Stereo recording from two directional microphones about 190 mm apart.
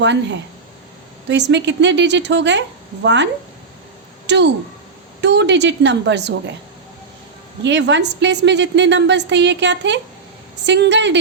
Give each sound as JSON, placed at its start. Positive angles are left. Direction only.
{"t": 0.0, "sound": "a woman's voice", "side_deg": -70}
{"t": 4.3, "sound": "a woman's voice", "side_deg": -65}
{"t": 7.6, "sound": "a woman's voice", "side_deg": -70}